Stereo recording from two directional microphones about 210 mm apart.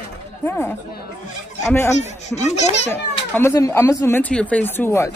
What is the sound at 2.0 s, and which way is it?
Speech, 30° left (ahead or behind).